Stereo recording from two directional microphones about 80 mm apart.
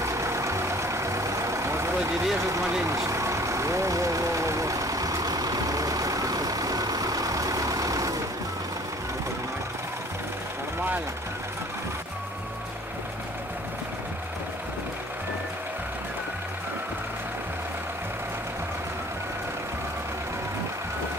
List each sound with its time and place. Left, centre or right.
0.0 s vehicle: right
2.3 s speech: right
2.8 s vehicle: right